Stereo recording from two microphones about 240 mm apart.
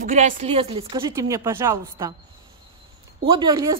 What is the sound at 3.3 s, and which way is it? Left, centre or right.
Speech, centre.